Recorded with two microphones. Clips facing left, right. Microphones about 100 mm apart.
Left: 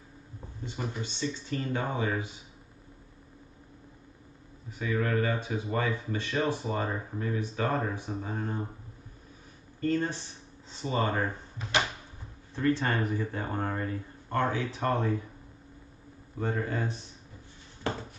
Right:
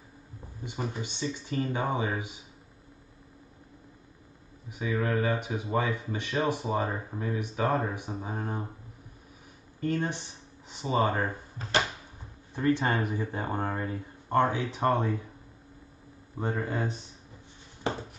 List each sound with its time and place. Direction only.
0.7 s speech: 15° right (ahead or behind)
4.6 s speech: 15° right (ahead or behind)
9.8 s speech: 15° right (ahead or behind)
12.5 s speech: 20° right (ahead or behind)
16.3 s speech: 20° right (ahead or behind)